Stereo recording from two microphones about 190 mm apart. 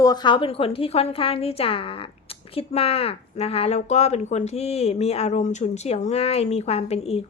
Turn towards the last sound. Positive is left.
turn(degrees=35)  # may be behind; listen again after turning